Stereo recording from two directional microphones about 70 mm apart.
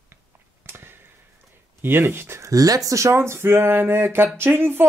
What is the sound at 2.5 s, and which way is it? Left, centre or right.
Speech, right.